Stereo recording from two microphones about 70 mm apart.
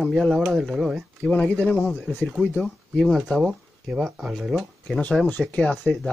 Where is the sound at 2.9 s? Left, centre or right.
Centre.